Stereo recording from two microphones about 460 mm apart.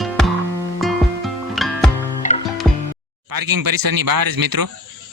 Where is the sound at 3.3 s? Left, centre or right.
Right.